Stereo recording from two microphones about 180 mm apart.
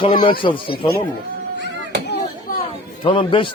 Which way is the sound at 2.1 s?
50° left (ahead or behind).